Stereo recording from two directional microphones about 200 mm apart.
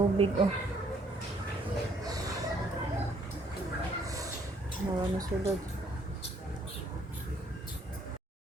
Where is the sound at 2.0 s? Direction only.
20° right (ahead or behind).